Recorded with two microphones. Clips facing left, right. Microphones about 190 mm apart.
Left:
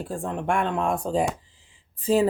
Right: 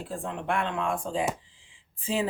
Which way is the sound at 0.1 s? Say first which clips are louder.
Left 4 dB; 45° left (ahead or behind).